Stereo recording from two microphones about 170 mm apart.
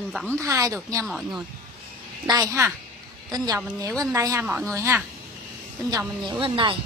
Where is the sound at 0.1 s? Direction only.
Centre (ahead or behind).